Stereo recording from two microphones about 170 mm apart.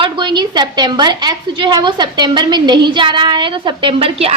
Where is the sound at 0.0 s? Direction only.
25° right (ahead or behind).